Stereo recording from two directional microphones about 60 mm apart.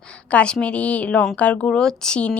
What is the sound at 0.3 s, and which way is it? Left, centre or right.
A woman's voice, left.